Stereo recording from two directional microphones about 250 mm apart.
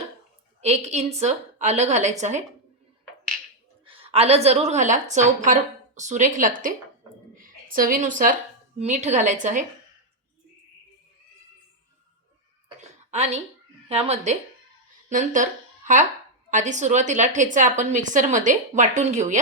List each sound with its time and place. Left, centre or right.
0.9 s a woman's voice: right
3.8 s a woman's voice: right
12.6 s a sound: right
13.8 s a woman's voice: right
16.5 s a woman's voice: right